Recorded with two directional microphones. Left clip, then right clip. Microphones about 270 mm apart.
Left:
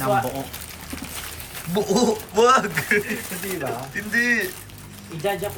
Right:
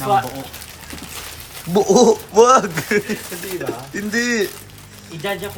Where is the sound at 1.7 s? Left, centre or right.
Centre.